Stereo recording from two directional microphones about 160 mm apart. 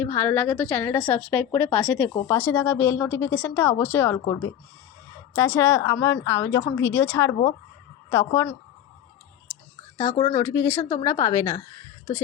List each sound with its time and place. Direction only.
0.0 s a woman's voice: 15° left (ahead or behind)
10.2 s speech: 30° left (ahead or behind)
10.4 s a woman's voice: 20° left (ahead or behind)